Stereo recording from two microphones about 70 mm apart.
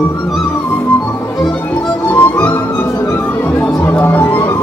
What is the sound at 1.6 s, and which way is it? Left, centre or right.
Music, left.